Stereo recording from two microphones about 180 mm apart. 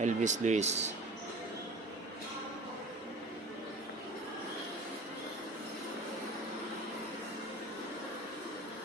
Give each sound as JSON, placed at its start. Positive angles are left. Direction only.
{"t": 0.0, "sound": "speech", "side_deg": -40}